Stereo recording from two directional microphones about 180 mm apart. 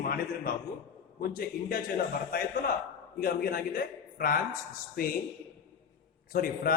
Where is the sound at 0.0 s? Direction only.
55° left (ahead or behind).